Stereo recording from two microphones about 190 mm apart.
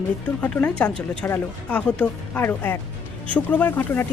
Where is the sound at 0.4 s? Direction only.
5° left (ahead or behind).